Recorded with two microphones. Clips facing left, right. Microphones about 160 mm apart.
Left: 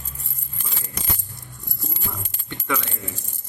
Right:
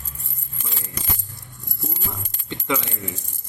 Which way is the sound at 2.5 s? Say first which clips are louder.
Right 2 dB; 20° right (ahead or behind).